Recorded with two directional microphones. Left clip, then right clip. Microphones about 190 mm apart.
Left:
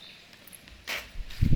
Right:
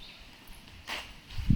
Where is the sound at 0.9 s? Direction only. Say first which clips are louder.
Left 3 dB; 65° left (ahead or behind).